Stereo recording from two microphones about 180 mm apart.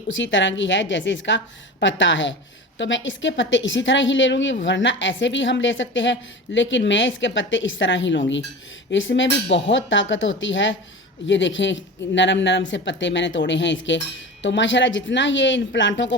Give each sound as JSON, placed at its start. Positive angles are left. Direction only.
{"t": 0.1, "sound": "a woman's voice", "side_deg": 90}